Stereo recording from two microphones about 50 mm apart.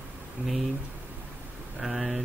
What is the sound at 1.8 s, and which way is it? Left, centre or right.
Speech, centre.